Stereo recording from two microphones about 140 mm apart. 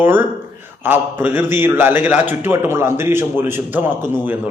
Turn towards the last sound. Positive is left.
turn(degrees=-15)  # may be behind; listen again after turning